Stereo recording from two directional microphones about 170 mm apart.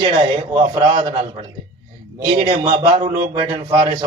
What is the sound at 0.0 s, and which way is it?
A man's voice, 25° right (ahead or behind).